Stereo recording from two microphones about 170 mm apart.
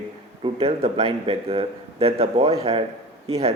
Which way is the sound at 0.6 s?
35° right (ahead or behind).